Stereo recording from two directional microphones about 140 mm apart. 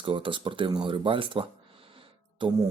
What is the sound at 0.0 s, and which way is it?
Speech, 35° right (ahead or behind).